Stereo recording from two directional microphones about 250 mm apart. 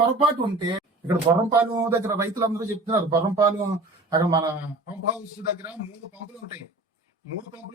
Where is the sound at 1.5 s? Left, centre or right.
Centre.